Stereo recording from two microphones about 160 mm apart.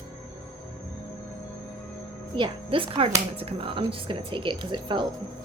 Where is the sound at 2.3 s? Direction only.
30° right (ahead or behind).